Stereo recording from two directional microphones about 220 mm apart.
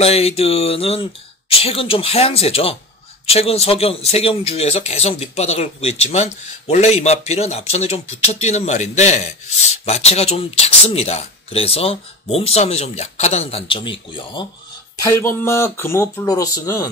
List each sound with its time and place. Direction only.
0.0 s speech: 25° left (ahead or behind)